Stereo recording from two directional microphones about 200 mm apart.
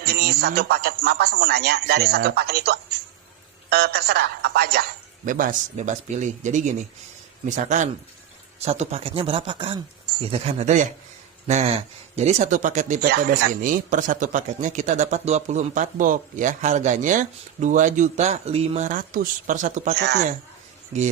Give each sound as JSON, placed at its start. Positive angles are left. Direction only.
{"t": 0.0, "sound": "a woman's voice", "side_deg": -55}
{"t": 13.1, "sound": "speech", "side_deg": -50}
{"t": 20.0, "sound": "speech", "side_deg": -55}